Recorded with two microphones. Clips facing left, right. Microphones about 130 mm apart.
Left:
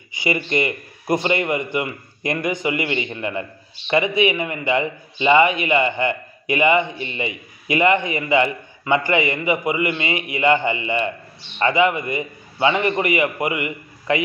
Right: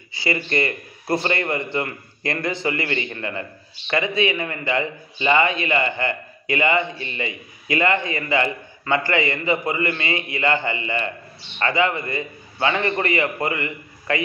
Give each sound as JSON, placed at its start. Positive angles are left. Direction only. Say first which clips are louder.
{"t": 0.1, "sound": "a man's voice", "louder": "left 2 dB", "side_deg": 20}